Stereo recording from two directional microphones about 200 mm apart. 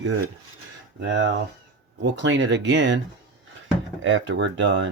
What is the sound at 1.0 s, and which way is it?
Cutlery, 65° right (ahead or behind).